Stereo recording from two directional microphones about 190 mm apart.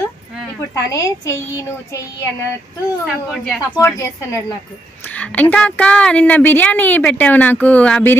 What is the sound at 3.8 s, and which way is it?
A woman's voice, 15° left (ahead or behind).